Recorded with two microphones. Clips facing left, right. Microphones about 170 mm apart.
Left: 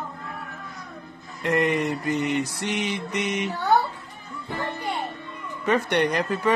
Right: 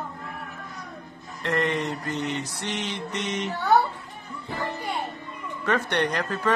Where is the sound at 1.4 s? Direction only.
10° left (ahead or behind).